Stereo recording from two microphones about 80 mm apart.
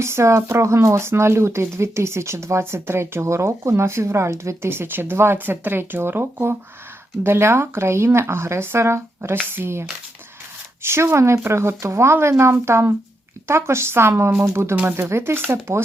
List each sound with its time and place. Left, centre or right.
0.0 s speech: right
10.8 s speech: right